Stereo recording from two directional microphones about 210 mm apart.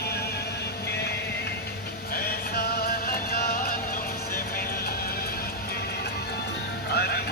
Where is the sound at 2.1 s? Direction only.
45° left (ahead or behind).